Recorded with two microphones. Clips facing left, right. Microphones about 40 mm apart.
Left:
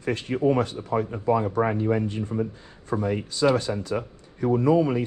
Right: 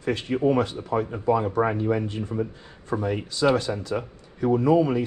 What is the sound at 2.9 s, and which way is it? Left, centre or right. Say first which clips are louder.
Speech: even; centre.